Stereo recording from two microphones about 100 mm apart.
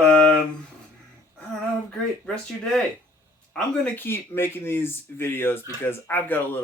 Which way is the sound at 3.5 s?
15° left (ahead or behind).